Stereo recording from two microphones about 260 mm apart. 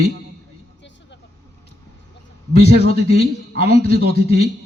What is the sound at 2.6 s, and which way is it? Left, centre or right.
A man's voice, right.